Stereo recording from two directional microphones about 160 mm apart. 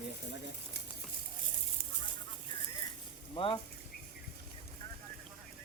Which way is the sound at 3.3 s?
30° left (ahead or behind).